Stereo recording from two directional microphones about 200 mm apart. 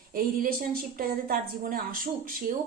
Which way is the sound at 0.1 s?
45° right (ahead or behind).